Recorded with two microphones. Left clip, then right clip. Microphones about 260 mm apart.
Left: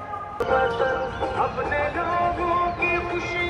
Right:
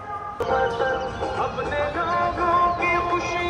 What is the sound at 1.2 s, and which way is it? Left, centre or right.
Speech, left.